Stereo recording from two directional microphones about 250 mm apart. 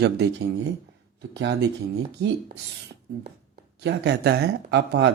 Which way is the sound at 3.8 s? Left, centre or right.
Right.